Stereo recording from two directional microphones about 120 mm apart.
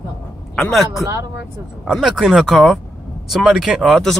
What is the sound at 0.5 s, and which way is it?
Speech, 5° left (ahead or behind).